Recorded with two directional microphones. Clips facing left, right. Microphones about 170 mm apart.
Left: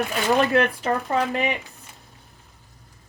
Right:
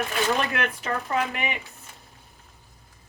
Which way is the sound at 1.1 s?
35° left (ahead or behind).